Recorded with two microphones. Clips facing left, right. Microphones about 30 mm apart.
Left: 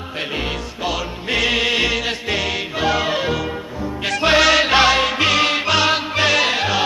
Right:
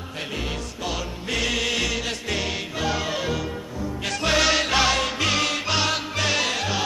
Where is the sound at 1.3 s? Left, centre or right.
Left.